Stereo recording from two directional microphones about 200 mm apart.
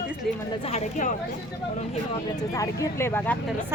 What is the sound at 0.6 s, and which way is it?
Speech, 35° left (ahead or behind).